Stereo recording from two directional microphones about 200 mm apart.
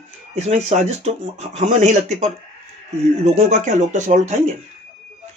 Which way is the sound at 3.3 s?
35° right (ahead or behind).